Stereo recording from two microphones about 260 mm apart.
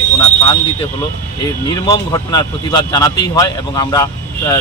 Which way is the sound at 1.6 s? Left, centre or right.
Centre.